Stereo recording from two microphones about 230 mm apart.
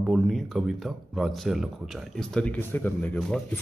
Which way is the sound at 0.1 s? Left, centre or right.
Centre.